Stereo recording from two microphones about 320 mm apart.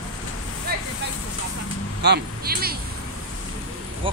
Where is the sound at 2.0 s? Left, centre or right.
Right.